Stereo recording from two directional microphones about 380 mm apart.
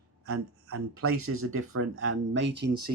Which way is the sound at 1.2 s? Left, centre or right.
Right.